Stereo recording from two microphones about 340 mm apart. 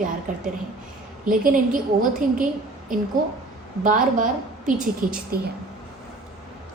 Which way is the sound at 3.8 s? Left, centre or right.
Right.